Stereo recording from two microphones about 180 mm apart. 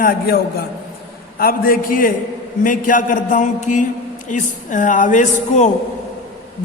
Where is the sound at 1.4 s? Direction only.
55° left (ahead or behind).